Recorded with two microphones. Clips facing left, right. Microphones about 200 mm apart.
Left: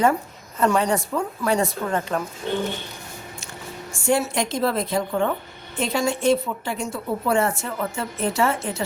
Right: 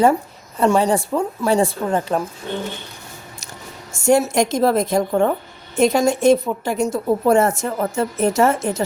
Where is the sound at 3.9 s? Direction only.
40° right (ahead or behind).